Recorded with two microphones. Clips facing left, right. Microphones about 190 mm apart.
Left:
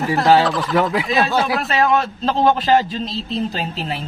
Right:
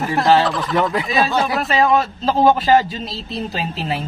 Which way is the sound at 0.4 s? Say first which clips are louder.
Left 1 dB; centre (ahead or behind).